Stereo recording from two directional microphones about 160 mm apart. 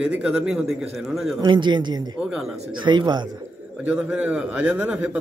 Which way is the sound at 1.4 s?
30° right (ahead or behind).